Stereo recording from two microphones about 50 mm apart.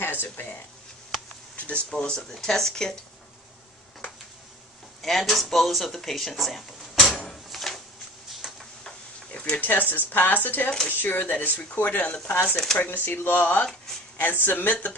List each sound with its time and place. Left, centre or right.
0.0 s a sound: left
1.6 s speech: left; by 3.0 s centre
5.0 s speech: centre
7.4 s a sound: centre
9.3 s speech: left
12.4 s speech: centre
12.7 s speech: left